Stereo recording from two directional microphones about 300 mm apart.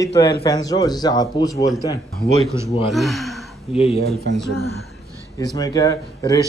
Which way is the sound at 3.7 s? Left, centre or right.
Centre.